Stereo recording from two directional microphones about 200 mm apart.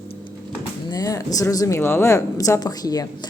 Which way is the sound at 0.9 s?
15° left (ahead or behind).